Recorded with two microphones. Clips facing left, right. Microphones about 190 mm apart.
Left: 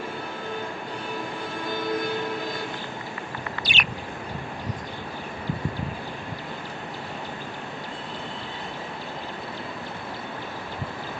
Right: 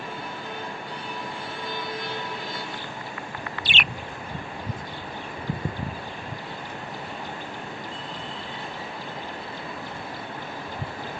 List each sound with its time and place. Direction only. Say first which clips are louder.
3.6 s bird: even; 40° left (ahead or behind)